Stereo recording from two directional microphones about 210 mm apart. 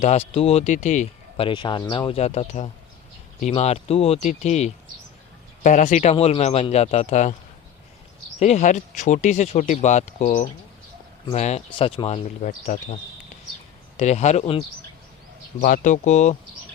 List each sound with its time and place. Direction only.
0.0 s speech: 30° left (ahead or behind)
8.4 s speech: 35° left (ahead or behind)
15.6 s speech: 40° left (ahead or behind)